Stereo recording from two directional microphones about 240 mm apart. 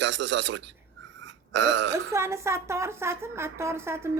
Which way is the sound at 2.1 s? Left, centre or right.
Centre.